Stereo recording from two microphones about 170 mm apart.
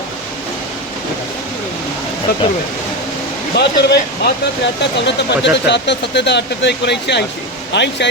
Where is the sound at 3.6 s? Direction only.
75° left (ahead or behind).